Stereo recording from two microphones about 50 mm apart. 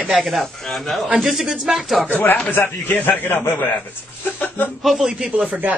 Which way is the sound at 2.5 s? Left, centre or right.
Left.